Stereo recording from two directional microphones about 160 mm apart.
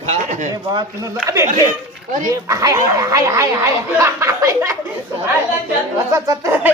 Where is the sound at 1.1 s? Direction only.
20° right (ahead or behind).